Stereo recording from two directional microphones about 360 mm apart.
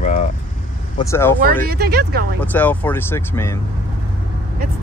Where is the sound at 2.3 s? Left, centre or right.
Centre.